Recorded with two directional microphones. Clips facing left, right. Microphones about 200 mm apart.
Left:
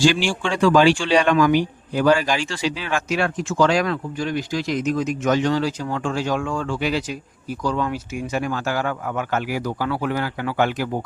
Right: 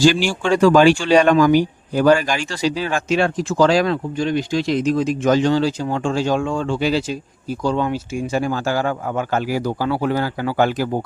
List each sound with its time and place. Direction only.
0.0 s speech: 40° right (ahead or behind)
3.1 s speech: 30° right (ahead or behind)